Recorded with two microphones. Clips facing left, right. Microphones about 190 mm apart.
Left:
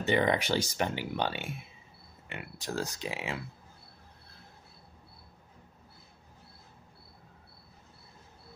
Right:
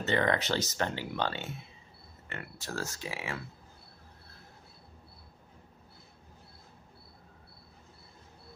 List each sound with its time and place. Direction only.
0.0 s speech: 15° left (ahead or behind)